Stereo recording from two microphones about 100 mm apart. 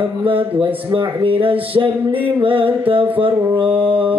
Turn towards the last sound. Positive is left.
turn(degrees=-60)  # may be behind; listen again after turning